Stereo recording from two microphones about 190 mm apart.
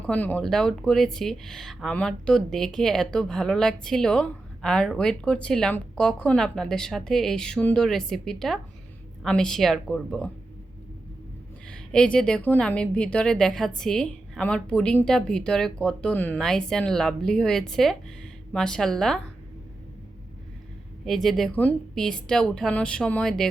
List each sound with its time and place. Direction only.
0.0 s speech: 10° left (ahead or behind)
11.7 s speech: 5° left (ahead or behind)
21.0 s speech: centre (ahead or behind)